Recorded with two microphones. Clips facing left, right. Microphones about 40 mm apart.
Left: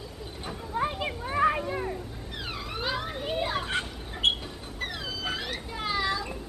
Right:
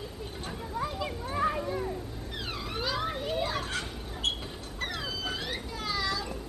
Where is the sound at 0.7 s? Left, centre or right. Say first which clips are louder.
Left 4 dB; left.